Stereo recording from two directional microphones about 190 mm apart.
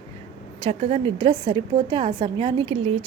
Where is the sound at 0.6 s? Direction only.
30° right (ahead or behind).